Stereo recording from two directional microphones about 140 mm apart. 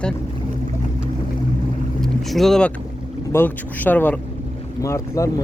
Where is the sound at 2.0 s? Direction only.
Centre (ahead or behind).